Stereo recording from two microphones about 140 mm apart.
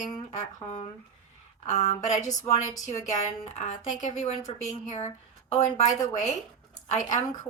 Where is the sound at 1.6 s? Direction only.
55° left (ahead or behind).